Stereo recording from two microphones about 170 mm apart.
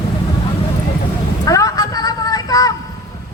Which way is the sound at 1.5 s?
20° left (ahead or behind).